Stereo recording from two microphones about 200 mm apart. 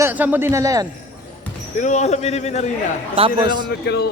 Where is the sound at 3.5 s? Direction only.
20° right (ahead or behind).